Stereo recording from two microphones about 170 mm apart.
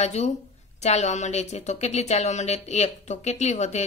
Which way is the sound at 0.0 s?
40° left (ahead or behind).